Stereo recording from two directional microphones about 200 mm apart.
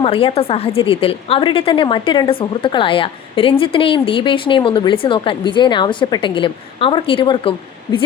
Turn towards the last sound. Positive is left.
turn(degrees=25)  # may be behind; listen again after turning